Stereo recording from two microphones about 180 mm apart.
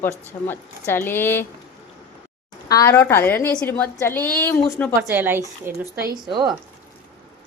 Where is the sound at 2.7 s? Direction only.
15° left (ahead or behind).